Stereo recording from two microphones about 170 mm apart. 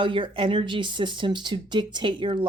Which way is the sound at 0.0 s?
30° right (ahead or behind).